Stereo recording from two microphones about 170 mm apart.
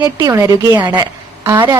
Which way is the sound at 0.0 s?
20° right (ahead or behind).